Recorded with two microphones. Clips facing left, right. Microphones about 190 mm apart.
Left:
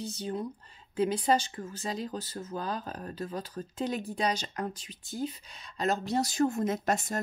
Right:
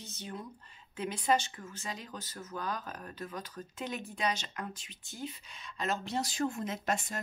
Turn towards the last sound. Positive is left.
turn(degrees=40)  # may be behind; listen again after turning